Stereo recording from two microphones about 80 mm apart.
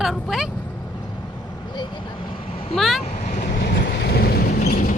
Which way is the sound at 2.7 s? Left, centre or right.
Centre.